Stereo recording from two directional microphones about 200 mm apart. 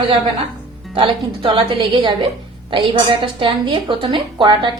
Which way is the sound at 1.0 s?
25° right (ahead or behind).